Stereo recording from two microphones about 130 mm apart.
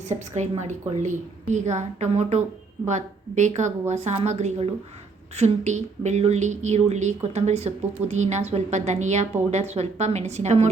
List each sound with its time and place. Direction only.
0.1 s a woman's voice: 65° right (ahead or behind)